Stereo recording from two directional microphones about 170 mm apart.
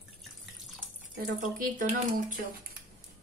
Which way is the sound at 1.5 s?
55° right (ahead or behind).